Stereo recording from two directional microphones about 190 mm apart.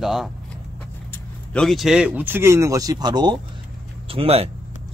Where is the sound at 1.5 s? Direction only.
Centre (ahead or behind).